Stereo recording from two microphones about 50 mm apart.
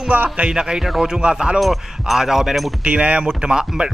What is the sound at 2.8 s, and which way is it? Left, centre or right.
Speech, right.